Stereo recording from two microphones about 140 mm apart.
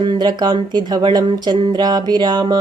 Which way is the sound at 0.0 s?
30° right (ahead or behind).